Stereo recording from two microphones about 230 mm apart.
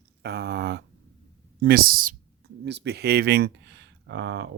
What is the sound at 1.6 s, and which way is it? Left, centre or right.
Speech, right.